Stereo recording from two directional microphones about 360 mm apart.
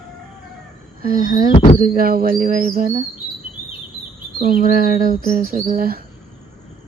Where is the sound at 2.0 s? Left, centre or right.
Right.